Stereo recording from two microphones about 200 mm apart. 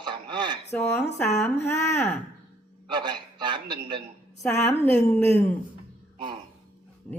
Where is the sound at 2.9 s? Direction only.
20° right (ahead or behind).